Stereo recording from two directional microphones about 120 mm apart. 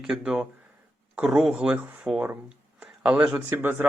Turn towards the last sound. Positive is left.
turn(degrees=-15)  # may be behind; listen again after turning